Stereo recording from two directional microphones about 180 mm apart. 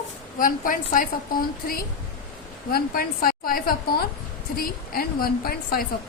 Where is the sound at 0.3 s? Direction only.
50° left (ahead or behind).